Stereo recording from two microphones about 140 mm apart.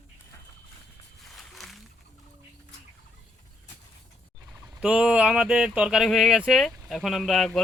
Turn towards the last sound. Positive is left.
turn(degrees=0)  # may be behind; listen again after turning